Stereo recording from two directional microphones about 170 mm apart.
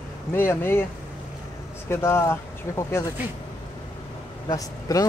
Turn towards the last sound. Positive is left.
turn(degrees=20)  # may be behind; listen again after turning